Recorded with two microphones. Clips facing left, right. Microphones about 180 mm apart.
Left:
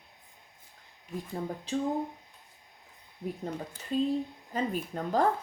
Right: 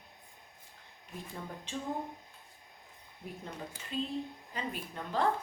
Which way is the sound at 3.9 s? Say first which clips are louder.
Left 8 dB; 40° left (ahead or behind).